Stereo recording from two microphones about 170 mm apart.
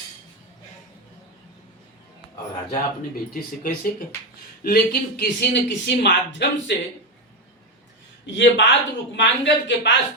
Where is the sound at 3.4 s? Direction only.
55° left (ahead or behind).